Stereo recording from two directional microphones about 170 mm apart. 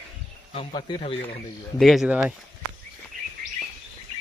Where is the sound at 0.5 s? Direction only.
30° left (ahead or behind).